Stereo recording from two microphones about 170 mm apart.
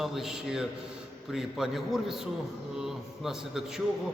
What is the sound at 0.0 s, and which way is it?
A man's voice, centre (ahead or behind).